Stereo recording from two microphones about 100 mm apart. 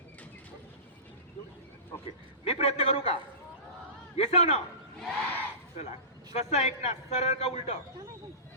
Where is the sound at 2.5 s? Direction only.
90° left.